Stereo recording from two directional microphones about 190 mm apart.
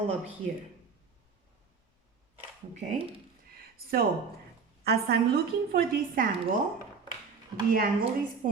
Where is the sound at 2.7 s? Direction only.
35° right (ahead or behind).